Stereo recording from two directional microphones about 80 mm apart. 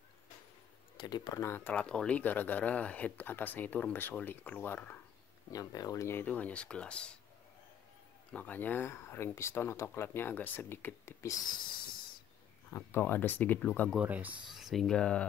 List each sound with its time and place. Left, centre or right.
0.9 s speech: left
1.3 s speech: left
1.6 s speech: centre
5.5 s speech: left
6.2 s speech: centre
8.3 s speech: centre
12.7 s speech: left
13.9 s speech: centre
14.5 s speech: centre